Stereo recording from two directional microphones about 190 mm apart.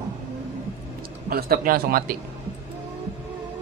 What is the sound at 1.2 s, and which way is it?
Speech, 50° right (ahead or behind).